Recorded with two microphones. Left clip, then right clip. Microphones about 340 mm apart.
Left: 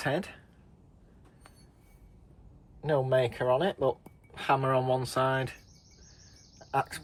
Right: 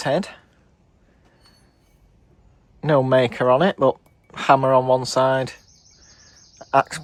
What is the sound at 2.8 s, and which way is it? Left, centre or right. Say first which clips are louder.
Speech: right 10 dB; right.